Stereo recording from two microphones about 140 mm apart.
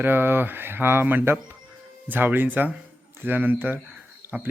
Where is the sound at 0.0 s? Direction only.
15° right (ahead or behind).